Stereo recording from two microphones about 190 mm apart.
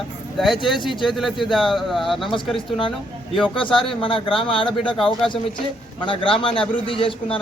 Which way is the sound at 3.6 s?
25° left (ahead or behind).